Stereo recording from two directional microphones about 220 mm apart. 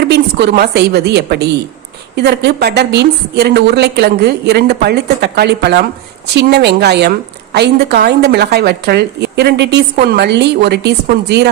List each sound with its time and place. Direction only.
0.1 s a woman's voice: 50° right (ahead or behind)